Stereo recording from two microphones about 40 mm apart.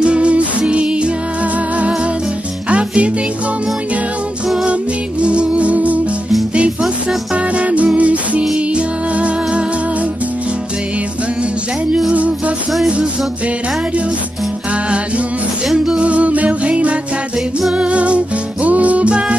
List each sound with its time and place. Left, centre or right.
0.0 s music: right
2.7 s music: right
5.2 s music: right
7.5 s music: right
12.8 s music: right
15.7 s music: centre
16.0 s music: right
19.0 s music: right